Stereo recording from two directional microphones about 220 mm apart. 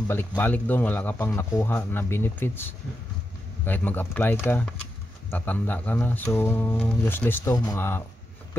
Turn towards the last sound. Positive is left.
turn(degrees=15)  # may be behind; listen again after turning